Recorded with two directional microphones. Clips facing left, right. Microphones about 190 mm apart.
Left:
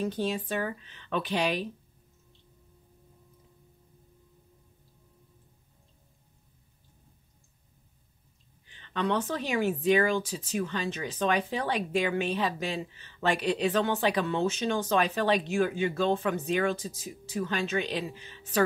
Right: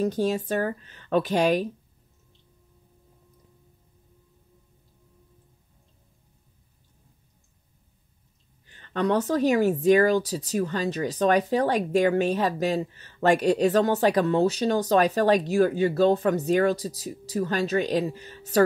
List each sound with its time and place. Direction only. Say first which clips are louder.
0.0 s speech: right 6 dB; 40° right (ahead or behind)
8.6 s speech: right 5 dB; 45° right (ahead or behind)